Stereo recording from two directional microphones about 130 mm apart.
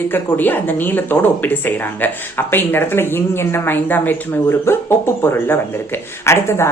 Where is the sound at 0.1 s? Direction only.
15° left (ahead or behind).